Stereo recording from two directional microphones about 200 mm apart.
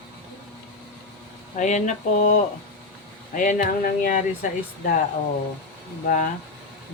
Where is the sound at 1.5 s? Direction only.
40° left (ahead or behind).